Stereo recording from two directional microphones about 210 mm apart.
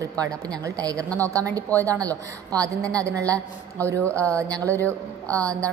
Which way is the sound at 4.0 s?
5° left (ahead or behind).